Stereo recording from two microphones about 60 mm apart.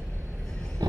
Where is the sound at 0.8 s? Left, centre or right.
Right.